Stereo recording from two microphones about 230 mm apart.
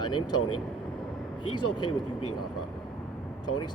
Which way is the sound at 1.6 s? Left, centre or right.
Left.